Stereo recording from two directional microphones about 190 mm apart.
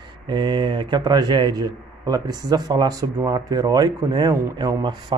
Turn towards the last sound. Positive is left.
turn(degrees=-20)  # may be behind; listen again after turning